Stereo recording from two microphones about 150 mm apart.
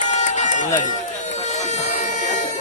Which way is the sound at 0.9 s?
55° left (ahead or behind).